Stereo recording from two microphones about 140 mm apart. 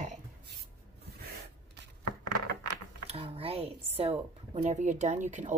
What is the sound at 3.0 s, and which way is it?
A woman's voice, 45° right (ahead or behind).